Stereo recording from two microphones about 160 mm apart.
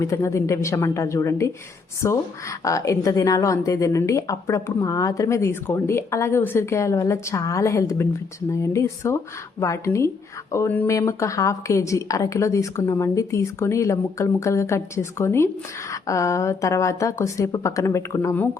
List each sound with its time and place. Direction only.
0.0 s a woman's voice: 20° left (ahead or behind)